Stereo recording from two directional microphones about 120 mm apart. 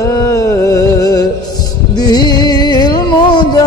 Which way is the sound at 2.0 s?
35° left (ahead or behind).